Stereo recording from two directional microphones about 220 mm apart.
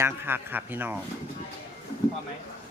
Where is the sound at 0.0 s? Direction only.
10° right (ahead or behind).